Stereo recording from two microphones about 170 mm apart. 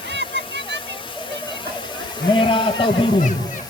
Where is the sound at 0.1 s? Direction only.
90° right.